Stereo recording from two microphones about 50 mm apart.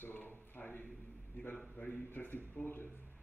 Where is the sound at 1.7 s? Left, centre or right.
Left.